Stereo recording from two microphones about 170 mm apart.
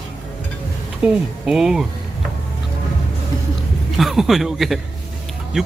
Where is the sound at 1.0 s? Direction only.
5° right (ahead or behind).